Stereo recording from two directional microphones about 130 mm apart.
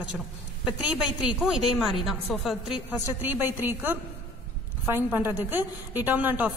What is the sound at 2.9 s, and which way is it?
A woman's voice, 15° right (ahead or behind).